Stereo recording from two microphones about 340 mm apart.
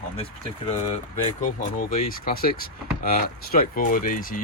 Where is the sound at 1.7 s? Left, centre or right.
Left.